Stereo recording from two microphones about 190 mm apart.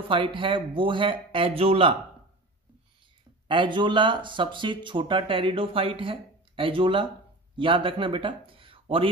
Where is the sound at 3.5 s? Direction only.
25° right (ahead or behind).